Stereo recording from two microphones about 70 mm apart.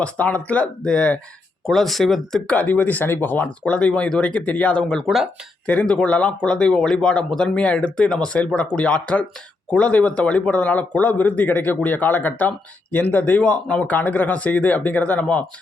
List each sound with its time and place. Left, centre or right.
0.0 s speech: centre
1.6 s speech: centre
2.5 s speech: left
4.8 s speech: centre
5.0 s speech: centre
5.6 s speech: centre